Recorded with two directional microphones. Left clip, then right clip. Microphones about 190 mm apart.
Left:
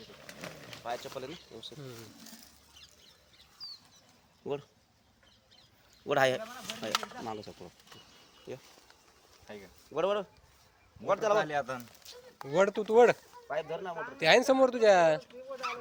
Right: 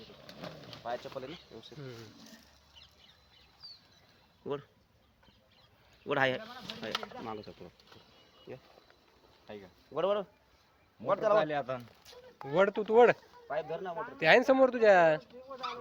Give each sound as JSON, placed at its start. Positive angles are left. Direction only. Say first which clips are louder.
{"t": 0.1, "sound": "vehicle", "louder": "left 1 dB", "side_deg": 5}
{"t": 0.8, "sound": "a sound", "louder": "even", "side_deg": 30}
{"t": 6.1, "sound": "speech", "louder": "left 3 dB", "side_deg": 35}
{"t": 9.5, "sound": "speech", "louder": "even", "side_deg": -40}
{"t": 9.9, "sound": "speech", "louder": "left 1 dB", "side_deg": 40}
{"t": 11.3, "sound": "speech", "louder": "right 1 dB", "side_deg": -40}
{"t": 12.1, "sound": "a sound", "louder": "left 3 dB", "side_deg": 25}
{"t": 12.4, "sound": "speech", "louder": "left 1 dB", "side_deg": 10}